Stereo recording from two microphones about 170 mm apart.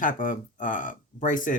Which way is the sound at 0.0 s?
50° left (ahead or behind).